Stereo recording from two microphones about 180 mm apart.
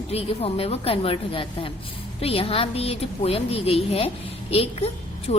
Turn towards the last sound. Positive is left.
turn(degrees=35)  # may be behind; listen again after turning